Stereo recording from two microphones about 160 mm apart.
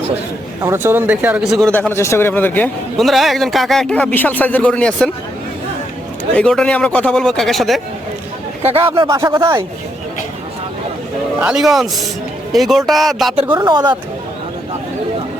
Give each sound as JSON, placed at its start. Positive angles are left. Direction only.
{"t": 0.6, "sound": "speech", "side_deg": -15}
{"t": 1.5, "sound": "a man's voice", "side_deg": 5}
{"t": 1.9, "sound": "speech", "side_deg": 15}
{"t": 3.0, "sound": "a man's voice", "side_deg": 0}
{"t": 6.3, "sound": "a man's voice", "side_deg": 5}
{"t": 9.0, "sound": "speech", "side_deg": -20}
{"t": 9.3, "sound": "speech", "side_deg": -30}
{"t": 11.3, "sound": "a man's voice", "side_deg": -5}
{"t": 13.5, "sound": "speech", "side_deg": -30}